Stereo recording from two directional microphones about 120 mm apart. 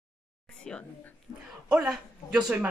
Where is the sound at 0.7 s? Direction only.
5° left (ahead or behind).